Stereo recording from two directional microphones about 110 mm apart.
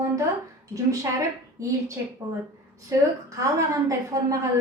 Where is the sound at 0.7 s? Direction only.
30° right (ahead or behind).